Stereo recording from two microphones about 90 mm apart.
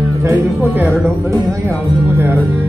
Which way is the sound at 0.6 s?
20° right (ahead or behind).